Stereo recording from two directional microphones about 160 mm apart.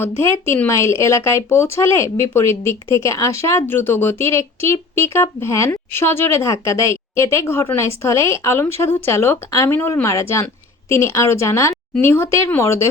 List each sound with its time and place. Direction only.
0.0 s a woman's voice: 15° left (ahead or behind)